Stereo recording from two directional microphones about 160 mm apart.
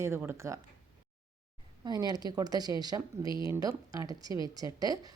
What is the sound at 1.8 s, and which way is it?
Speech, 25° right (ahead or behind).